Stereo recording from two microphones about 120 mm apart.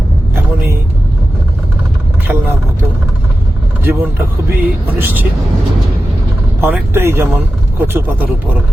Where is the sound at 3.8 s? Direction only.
15° right (ahead or behind).